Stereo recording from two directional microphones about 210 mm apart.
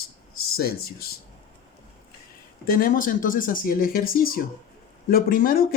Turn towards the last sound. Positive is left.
turn(degrees=45)  # may be behind; listen again after turning